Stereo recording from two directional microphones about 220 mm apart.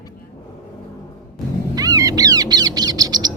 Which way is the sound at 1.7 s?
15° right (ahead or behind).